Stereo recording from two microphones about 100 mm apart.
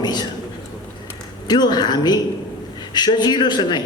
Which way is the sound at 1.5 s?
45° left (ahead or behind).